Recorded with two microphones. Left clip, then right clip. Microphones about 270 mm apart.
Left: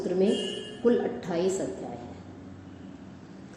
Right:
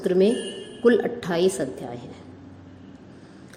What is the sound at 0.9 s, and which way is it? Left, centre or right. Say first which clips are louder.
Speech: right 6 dB; right.